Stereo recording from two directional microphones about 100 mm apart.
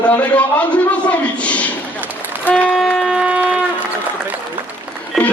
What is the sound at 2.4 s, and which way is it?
Wind instrument, 10° left (ahead or behind).